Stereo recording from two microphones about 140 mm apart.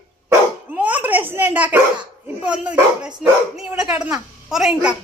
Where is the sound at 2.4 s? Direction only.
5° right (ahead or behind).